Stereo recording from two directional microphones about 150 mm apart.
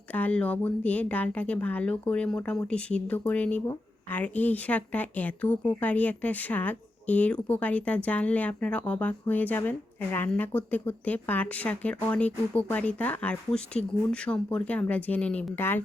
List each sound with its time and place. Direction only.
0.1 s a woman's voice: 10° left (ahead or behind)